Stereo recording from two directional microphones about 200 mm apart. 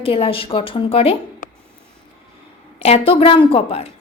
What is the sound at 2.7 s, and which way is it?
Speech, 30° left (ahead or behind).